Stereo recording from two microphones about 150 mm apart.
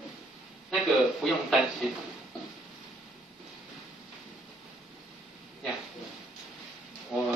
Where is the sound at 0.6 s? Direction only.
Centre (ahead or behind).